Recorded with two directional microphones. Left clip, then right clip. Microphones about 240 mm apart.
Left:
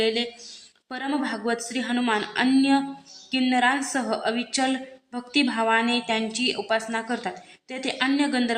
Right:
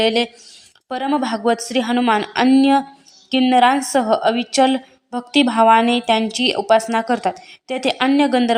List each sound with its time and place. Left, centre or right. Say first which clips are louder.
0.9 s a woman's voice: right 8 dB; right